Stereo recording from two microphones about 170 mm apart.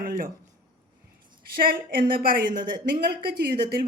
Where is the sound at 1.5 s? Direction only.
60° right (ahead or behind).